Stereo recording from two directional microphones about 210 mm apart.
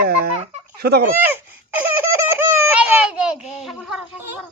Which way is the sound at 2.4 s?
10° right (ahead or behind).